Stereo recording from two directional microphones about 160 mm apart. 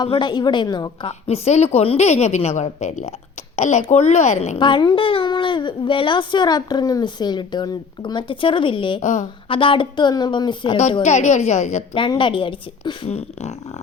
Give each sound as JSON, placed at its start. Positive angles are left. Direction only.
{"t": 0.0, "sound": "a child's voice", "side_deg": 30}
{"t": 1.3, "sound": "a woman's voice", "side_deg": 40}
{"t": 4.5, "sound": "a child's voice", "side_deg": 30}
{"t": 9.0, "sound": "a woman's voice", "side_deg": 50}
{"t": 9.5, "sound": "a child's voice", "side_deg": 35}
{"t": 11.0, "sound": "a woman's voice", "side_deg": 45}
{"t": 11.9, "sound": "a woman's voice", "side_deg": 30}
{"t": 13.1, "sound": "a woman's voice", "side_deg": 40}